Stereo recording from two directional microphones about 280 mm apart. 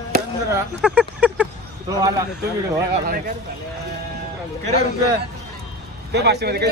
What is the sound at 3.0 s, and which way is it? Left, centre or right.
Speech, right.